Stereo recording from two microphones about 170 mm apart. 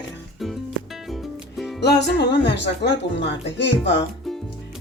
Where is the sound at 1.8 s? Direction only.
85° left.